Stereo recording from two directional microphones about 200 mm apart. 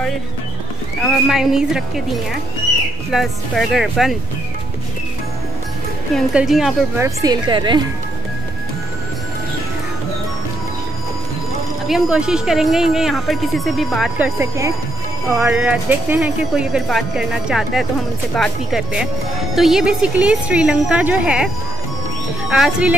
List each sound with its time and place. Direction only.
1.0 s speech: centre (ahead or behind)
3.1 s speech: centre (ahead or behind)
6.1 s speech: centre (ahead or behind)
7.0 s speech: 20° right (ahead or behind)
11.9 s speech: 5° right (ahead or behind)
22.5 s speech: 5° right (ahead or behind)